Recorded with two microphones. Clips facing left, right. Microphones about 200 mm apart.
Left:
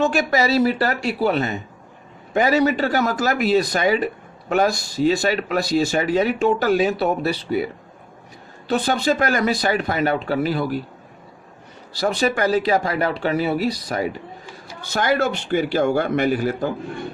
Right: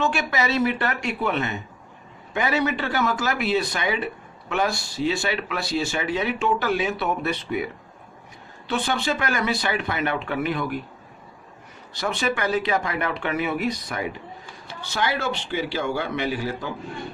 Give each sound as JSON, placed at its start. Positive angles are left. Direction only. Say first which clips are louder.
{"t": 0.0, "sound": "speech", "louder": "left 5 dB", "side_deg": 40}
{"t": 11.9, "sound": "a man's voice", "louder": "left 5 dB", "side_deg": 35}